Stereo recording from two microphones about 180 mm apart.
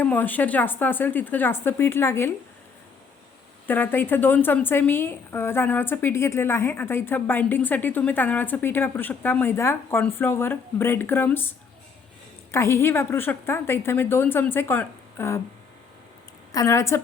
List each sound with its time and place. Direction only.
0.0 s a woman's voice: 10° left (ahead or behind)
3.7 s a woman's voice: 10° left (ahead or behind)
16.5 s a woman's voice: 20° left (ahead or behind)